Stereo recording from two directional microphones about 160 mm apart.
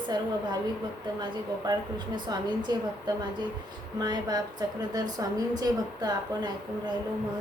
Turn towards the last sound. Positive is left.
turn(degrees=-25)  # may be behind; listen again after turning